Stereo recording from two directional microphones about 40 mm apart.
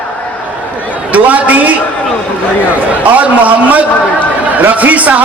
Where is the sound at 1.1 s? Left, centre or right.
Right.